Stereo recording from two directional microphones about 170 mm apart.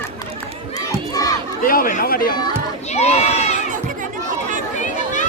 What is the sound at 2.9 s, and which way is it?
Run, 40° left (ahead or behind).